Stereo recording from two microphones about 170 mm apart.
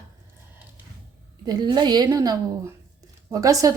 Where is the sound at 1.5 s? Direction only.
25° right (ahead or behind).